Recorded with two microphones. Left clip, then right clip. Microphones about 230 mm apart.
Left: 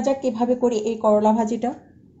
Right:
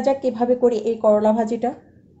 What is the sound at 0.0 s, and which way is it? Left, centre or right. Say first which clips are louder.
A woman's voice: right 2 dB; centre.